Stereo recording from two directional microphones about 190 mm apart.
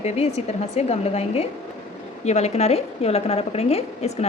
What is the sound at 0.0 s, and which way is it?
A woman's voice, 35° left (ahead or behind).